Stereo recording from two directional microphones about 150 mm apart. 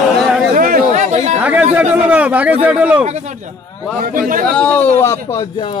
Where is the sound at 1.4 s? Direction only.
10° right (ahead or behind).